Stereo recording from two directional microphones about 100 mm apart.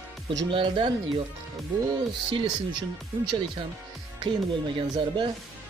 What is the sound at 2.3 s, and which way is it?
Speech, 50° right (ahead or behind).